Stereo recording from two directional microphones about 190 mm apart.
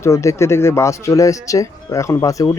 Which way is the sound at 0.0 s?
15° left (ahead or behind).